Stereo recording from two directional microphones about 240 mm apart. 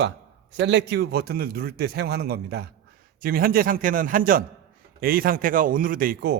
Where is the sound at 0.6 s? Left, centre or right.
Right.